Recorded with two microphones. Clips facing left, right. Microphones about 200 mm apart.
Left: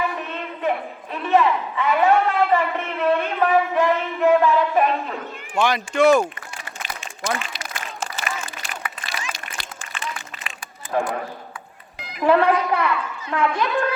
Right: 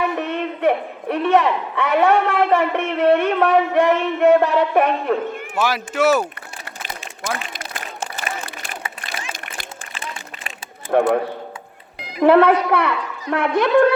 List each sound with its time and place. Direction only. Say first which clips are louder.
0.2 s a man's voice: right 7 dB; 70° right (ahead or behind)
5.5 s speech: left 1 dB; 5° right (ahead or behind)
7.5 s a sound: right 1 dB; 50° right (ahead or behind)
8.7 s run: even; 25° right (ahead or behind)
9.9 s a sound: left 2 dB; 30° right (ahead or behind)
10.9 s a man's voice: right 7 dB; 60° right (ahead or behind)
12.2 s a man's voice: right 5 dB; 65° right (ahead or behind)